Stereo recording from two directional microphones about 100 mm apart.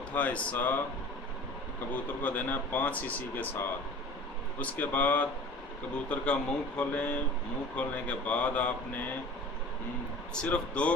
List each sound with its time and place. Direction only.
0.1 s speech: 15° left (ahead or behind)
2.2 s speech: 20° left (ahead or behind)
10.3 s speech: 10° left (ahead or behind)